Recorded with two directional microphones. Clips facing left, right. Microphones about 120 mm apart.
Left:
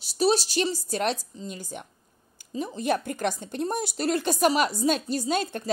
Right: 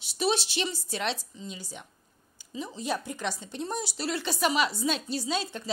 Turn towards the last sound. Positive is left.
turn(degrees=55)  # may be behind; listen again after turning